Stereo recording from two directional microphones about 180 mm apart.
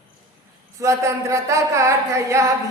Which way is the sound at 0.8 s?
15° right (ahead or behind).